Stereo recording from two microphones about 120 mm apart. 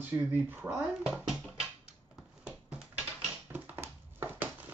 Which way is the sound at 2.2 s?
5° right (ahead or behind).